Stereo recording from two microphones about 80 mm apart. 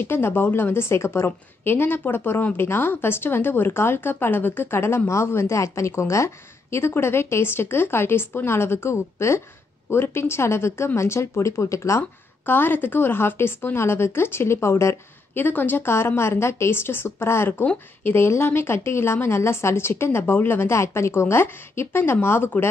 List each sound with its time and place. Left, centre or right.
0.0 s a woman's voice: left
12.0 s a woman's voice: left
15.4 s a woman's voice: left